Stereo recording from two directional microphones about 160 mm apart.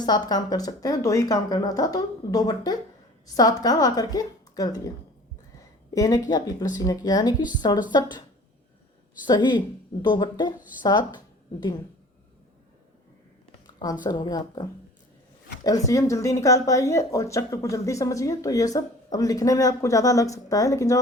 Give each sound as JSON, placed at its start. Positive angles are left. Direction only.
{"t": 0.0, "sound": "speech", "side_deg": 25}
{"t": 5.9, "sound": "speech", "side_deg": 20}
{"t": 9.2, "sound": "speech", "side_deg": 30}
{"t": 13.7, "sound": "a sound", "side_deg": 25}
{"t": 14.0, "sound": "speech", "side_deg": 25}